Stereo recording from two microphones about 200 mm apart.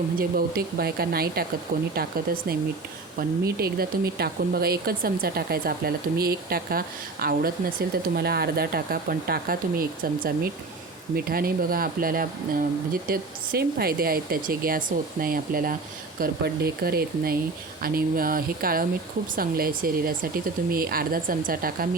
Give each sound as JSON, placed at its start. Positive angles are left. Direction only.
{"t": 0.2, "sound": "speech", "side_deg": -50}
{"t": 3.2, "sound": "speech", "side_deg": -50}